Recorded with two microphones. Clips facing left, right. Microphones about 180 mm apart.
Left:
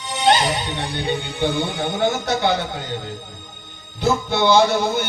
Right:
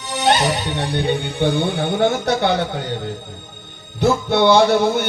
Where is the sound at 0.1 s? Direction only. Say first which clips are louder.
Right 1 dB; 60° right (ahead or behind).